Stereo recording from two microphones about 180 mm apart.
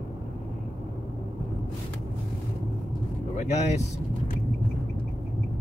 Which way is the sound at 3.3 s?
40° left (ahead or behind).